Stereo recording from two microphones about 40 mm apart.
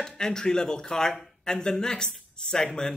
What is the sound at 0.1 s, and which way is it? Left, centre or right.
Speech, centre.